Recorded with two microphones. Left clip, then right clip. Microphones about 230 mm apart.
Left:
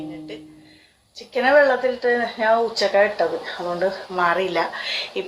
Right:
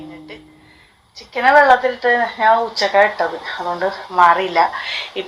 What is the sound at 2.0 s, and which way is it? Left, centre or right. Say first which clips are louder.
Speech: right 5 dB; centre.